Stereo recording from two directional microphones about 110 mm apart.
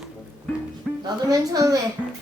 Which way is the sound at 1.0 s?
35° right (ahead or behind).